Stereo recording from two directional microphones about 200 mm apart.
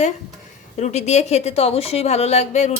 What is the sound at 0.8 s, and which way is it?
A woman's voice, 35° left (ahead or behind).